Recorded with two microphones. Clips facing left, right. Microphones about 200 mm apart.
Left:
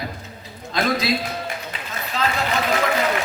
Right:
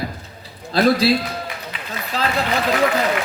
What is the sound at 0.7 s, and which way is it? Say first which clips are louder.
Speech: right 7 dB; 35° right (ahead or behind).